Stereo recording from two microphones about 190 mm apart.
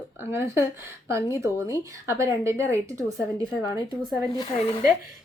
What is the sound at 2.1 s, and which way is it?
Speech, 15° right (ahead or behind).